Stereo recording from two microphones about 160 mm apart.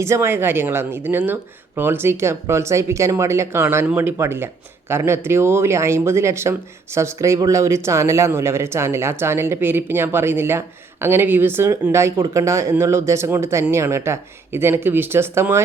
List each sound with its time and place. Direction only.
0.0 s speech: 15° right (ahead or behind)